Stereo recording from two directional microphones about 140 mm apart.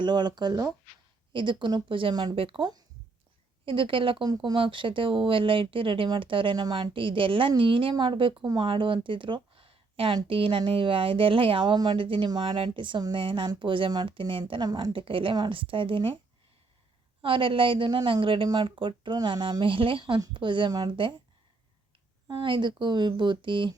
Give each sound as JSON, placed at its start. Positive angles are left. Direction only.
{"t": 0.0, "sound": "speech", "side_deg": -30}
{"t": 3.7, "sound": "speech", "side_deg": -40}
{"t": 17.2, "sound": "speech", "side_deg": -40}
{"t": 22.3, "sound": "speech", "side_deg": -35}